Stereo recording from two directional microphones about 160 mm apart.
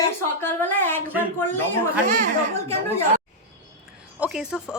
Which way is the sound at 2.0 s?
60° right (ahead or behind).